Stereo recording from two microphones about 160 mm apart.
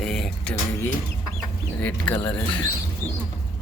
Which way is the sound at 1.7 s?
10° left (ahead or behind).